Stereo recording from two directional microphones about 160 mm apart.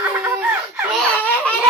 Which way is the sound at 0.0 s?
15° right (ahead or behind).